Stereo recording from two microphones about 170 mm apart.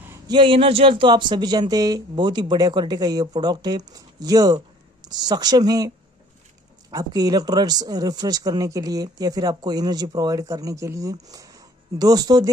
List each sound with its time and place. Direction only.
0.3 s speech: 30° right (ahead or behind)
6.9 s speech: 20° right (ahead or behind)